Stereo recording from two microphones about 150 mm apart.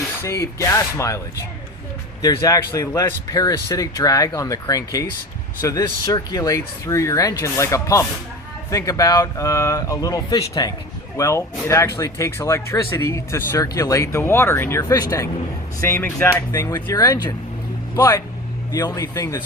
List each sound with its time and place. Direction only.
0.2 s speech: 20° left (ahead or behind)
2.2 s speech: 25° left (ahead or behind)